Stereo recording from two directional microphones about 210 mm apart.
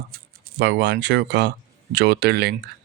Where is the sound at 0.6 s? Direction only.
55° right (ahead or behind).